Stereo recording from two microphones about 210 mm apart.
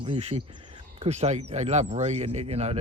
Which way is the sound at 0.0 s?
30° right (ahead or behind).